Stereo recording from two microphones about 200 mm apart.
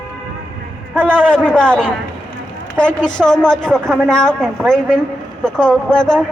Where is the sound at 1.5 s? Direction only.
5° left (ahead or behind).